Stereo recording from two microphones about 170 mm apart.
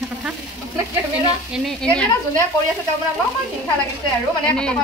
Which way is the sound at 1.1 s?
Centre (ahead or behind).